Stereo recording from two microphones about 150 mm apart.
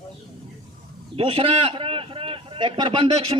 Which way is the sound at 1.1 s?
35° right (ahead or behind).